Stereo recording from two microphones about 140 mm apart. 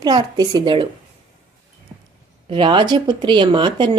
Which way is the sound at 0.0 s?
30° right (ahead or behind).